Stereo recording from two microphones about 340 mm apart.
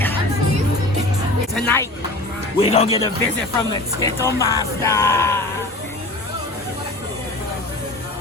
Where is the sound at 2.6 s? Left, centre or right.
Centre.